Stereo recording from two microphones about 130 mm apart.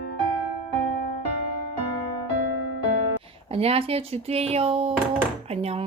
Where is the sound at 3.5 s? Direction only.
50° right (ahead or behind).